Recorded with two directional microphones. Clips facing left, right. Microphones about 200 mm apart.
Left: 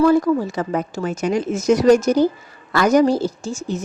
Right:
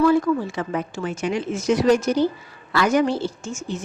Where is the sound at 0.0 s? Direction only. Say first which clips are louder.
Left 3 dB; 40° left (ahead or behind).